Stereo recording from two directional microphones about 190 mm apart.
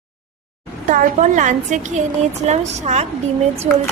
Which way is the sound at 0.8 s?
40° right (ahead or behind).